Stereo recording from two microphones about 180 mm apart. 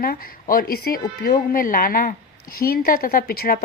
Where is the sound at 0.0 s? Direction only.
50° left (ahead or behind).